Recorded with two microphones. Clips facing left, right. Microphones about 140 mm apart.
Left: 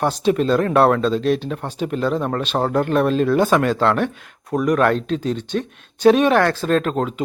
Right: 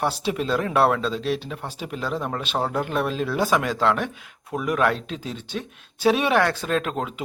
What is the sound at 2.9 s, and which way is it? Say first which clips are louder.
Speech: left 8 dB; 5° right (ahead or behind).